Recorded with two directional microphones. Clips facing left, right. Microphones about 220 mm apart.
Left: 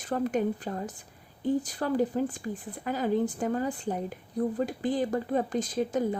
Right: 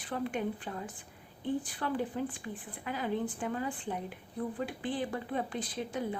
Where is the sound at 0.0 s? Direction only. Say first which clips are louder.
Left 7 dB; 45° left (ahead or behind).